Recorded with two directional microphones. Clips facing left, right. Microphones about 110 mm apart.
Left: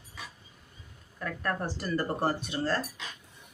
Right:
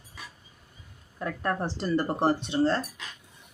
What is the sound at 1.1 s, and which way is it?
Speech, 25° right (ahead or behind).